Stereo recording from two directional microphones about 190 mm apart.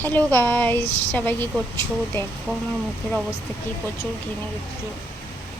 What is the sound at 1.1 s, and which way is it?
Speech, 10° left (ahead or behind).